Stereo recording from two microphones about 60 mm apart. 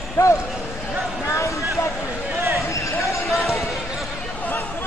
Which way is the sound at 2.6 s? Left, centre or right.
Left.